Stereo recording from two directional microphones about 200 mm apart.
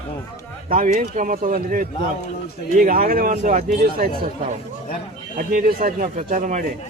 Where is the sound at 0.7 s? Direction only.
45° right (ahead or behind).